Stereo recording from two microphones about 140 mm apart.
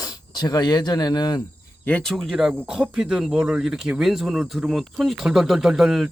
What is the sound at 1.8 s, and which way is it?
Speech, 10° left (ahead or behind).